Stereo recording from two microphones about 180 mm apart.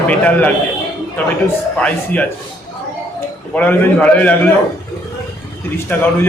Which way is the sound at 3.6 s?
10° left (ahead or behind).